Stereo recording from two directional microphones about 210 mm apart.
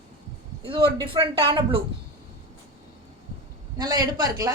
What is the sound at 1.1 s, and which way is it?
Speech, 25° right (ahead or behind).